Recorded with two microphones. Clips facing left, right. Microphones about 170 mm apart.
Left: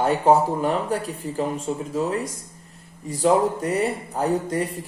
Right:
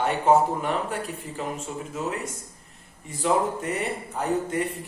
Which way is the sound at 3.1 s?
35° left (ahead or behind).